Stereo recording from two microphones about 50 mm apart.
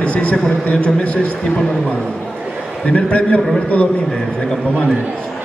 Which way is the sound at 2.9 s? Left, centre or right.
Left.